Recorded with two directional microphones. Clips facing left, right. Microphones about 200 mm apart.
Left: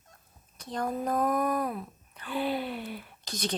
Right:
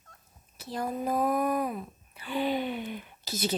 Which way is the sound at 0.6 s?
5° right (ahead or behind).